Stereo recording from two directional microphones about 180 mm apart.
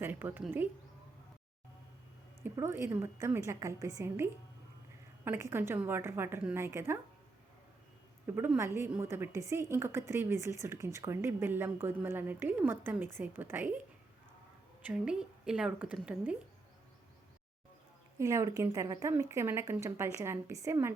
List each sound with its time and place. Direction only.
0.0 s a woman's voice: 10° right (ahead or behind)
2.4 s a woman's voice: 15° right (ahead or behind)
8.4 s a woman's voice: 15° right (ahead or behind)
14.8 s a woman's voice: 5° right (ahead or behind)
18.2 s a woman's voice: 15° right (ahead or behind)